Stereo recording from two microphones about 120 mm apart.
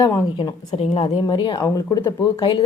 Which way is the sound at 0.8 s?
60° left (ahead or behind).